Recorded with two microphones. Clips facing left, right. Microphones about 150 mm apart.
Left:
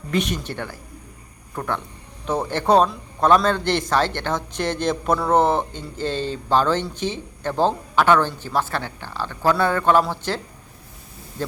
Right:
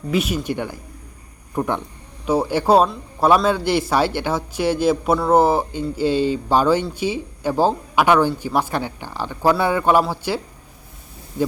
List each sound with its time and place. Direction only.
0.1 s a man's voice: 5° right (ahead or behind)